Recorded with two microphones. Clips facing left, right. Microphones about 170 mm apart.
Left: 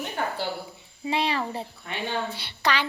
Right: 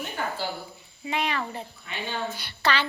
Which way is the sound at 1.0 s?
30° left (ahead or behind).